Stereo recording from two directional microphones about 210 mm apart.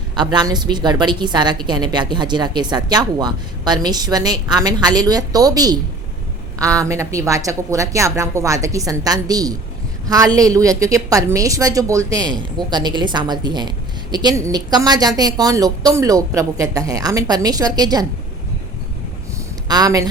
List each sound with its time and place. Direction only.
0.2 s a woman's voice: 20° right (ahead or behind)
19.6 s speech: 20° right (ahead or behind)